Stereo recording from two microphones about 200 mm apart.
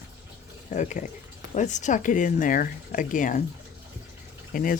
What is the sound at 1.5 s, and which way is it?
Speech, 35° left (ahead or behind).